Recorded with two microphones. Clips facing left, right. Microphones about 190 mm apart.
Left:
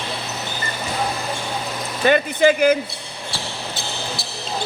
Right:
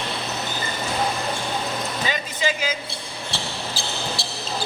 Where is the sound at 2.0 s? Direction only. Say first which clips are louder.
Left 13 dB; 60° left (ahead or behind).